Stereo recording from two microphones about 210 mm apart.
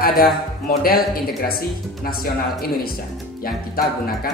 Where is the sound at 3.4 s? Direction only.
45° left (ahead or behind).